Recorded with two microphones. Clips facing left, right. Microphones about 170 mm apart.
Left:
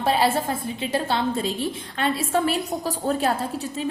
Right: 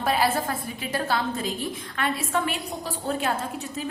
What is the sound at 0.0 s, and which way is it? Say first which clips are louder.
A woman's voice: left 3 dB; 30° left (ahead or behind).